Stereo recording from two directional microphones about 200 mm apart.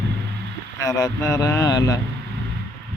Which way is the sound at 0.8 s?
20° left (ahead or behind).